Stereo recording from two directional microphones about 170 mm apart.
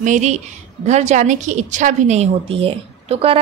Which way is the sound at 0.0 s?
45° right (ahead or behind).